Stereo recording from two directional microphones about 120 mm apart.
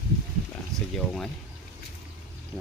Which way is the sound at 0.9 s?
5° left (ahead or behind).